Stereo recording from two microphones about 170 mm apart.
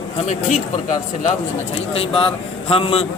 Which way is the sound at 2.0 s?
35° left (ahead or behind).